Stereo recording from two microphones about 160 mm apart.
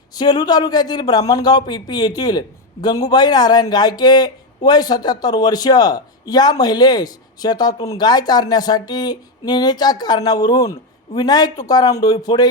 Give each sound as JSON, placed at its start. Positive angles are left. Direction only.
{"t": 0.1, "sound": "speech", "side_deg": 25}